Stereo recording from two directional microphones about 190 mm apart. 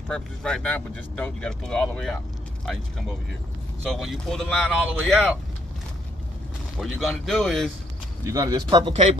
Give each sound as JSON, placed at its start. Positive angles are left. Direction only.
{"t": 0.1, "sound": "speech", "side_deg": 5}
{"t": 3.9, "sound": "speech", "side_deg": 0}
{"t": 6.8, "sound": "speech", "side_deg": 0}
{"t": 8.3, "sound": "speech", "side_deg": -20}